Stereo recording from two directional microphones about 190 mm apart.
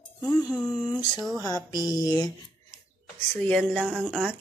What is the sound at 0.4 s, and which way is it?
Speech, centre (ahead or behind).